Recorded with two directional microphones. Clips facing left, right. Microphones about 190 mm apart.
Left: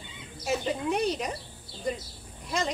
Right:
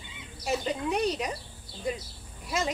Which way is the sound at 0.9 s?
Centre (ahead or behind).